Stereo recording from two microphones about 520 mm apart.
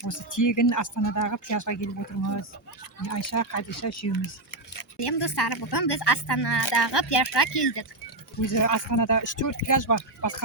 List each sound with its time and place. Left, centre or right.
0.0 s speech: left
4.8 s speech: left
8.4 s speech: left